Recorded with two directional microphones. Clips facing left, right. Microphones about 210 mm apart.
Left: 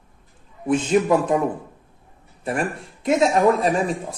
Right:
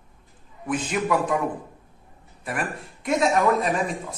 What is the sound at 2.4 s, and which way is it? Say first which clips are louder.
Speech: left 5 dB; 30° left (ahead or behind).